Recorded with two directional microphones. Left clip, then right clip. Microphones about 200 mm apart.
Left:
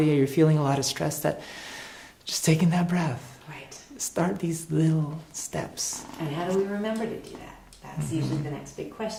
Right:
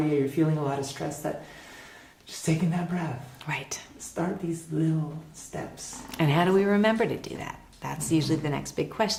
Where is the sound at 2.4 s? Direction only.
30° left (ahead or behind).